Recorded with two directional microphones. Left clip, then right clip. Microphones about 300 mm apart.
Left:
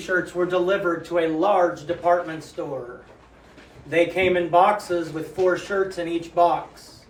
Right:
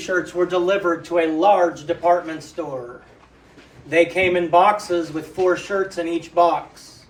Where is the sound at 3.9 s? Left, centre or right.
Right.